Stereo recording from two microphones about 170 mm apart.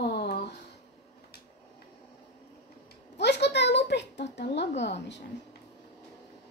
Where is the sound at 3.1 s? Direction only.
90° left.